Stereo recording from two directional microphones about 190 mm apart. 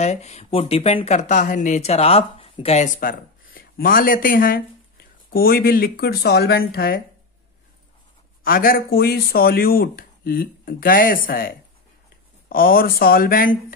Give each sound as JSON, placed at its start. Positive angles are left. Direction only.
{"t": 0.0, "sound": "speech", "side_deg": 35}
{"t": 3.0, "sound": "speech", "side_deg": 50}
{"t": 8.5, "sound": "speech", "side_deg": 50}